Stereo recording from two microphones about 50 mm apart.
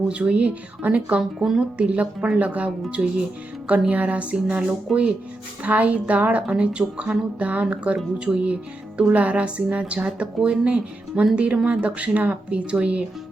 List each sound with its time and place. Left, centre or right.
0.1 s a woman's voice: right
1.4 s speech: centre
1.9 s a woman's voice: right
3.7 s a woman's voice: right
4.9 s speech: centre
5.6 s a woman's voice: right